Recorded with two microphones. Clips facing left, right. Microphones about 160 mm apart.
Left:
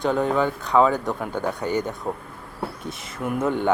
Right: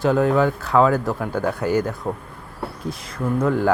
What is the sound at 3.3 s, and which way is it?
Speech, centre (ahead or behind).